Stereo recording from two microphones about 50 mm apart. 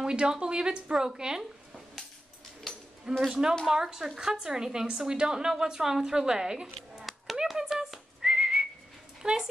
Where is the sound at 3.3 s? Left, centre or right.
Centre.